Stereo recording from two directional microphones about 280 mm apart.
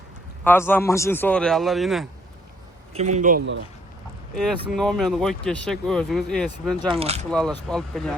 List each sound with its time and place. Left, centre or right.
0.4 s a man's voice: centre
2.9 s a man's voice: right
4.8 s speech: centre
6.8 s a man's voice: right
7.3 s speech: centre